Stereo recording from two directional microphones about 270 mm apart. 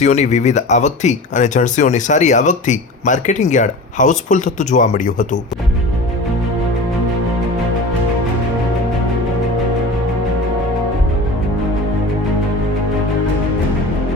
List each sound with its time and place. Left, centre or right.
0.0 s speech: left